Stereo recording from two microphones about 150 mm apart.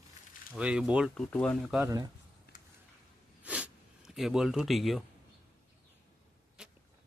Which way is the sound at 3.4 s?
10° right (ahead or behind).